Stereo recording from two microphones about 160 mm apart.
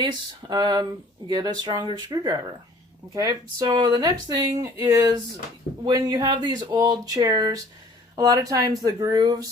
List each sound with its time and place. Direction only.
0.0 s speech: 25° right (ahead or behind)